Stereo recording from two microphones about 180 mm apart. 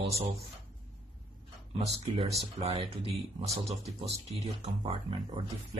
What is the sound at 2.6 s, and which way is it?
Speech, 35° right (ahead or behind).